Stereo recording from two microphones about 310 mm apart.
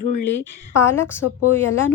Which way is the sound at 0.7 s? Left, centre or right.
Centre.